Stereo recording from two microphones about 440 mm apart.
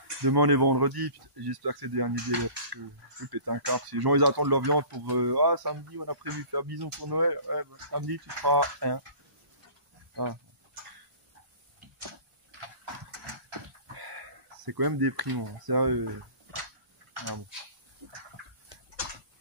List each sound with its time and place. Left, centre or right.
0.2 s speech: right
10.1 s speech: right
13.5 s a sound: right